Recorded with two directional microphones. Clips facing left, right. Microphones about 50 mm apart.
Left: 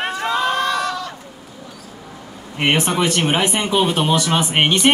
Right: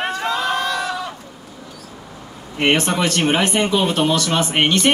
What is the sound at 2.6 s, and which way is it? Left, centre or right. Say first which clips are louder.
Speech: even; centre.